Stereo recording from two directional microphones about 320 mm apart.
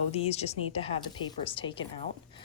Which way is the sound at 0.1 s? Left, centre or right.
Centre.